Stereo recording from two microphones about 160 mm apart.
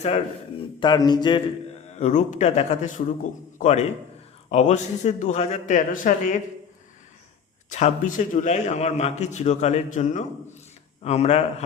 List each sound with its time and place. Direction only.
0.8 s a sound: 25° left (ahead or behind)
1.9 s a man's voice: 45° left (ahead or behind)
7.7 s a man's voice: 50° left (ahead or behind)